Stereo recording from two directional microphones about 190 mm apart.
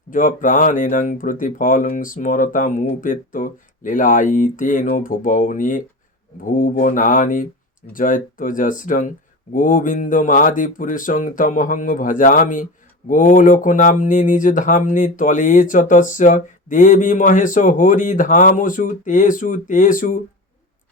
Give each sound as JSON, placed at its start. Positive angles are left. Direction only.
{"t": 0.1, "sound": "speech", "side_deg": 45}